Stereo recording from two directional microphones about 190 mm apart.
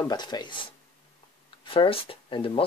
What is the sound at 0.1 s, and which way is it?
Speech, 20° left (ahead or behind).